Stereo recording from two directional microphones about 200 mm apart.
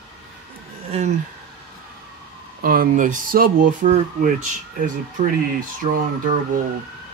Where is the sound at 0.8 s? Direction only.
30° right (ahead or behind).